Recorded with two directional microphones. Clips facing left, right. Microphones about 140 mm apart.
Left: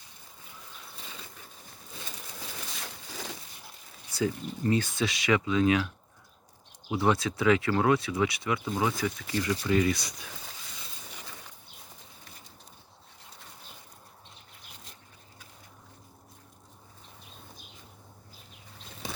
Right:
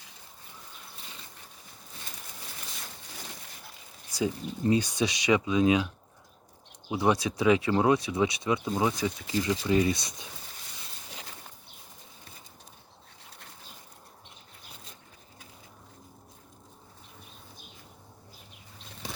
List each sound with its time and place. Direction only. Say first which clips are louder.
4.1 s speech: even; 20° right (ahead or behind)
6.9 s speech: even; 15° right (ahead or behind)